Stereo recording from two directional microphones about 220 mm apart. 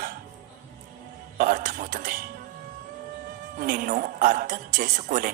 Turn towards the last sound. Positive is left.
turn(degrees=-40)  # may be behind; listen again after turning